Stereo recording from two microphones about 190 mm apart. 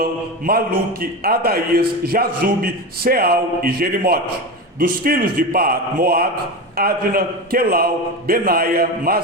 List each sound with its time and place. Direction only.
0.0 s a man's voice: 50° right (ahead or behind)